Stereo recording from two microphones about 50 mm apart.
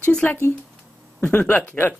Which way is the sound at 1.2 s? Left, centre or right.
Left.